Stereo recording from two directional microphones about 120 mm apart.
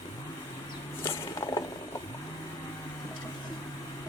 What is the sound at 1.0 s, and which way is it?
Mechanisms, 25° left (ahead or behind).